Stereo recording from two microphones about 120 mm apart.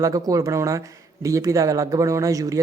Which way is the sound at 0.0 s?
30° right (ahead or behind).